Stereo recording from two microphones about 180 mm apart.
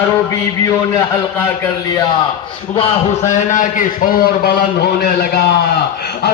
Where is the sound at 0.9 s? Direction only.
15° left (ahead or behind).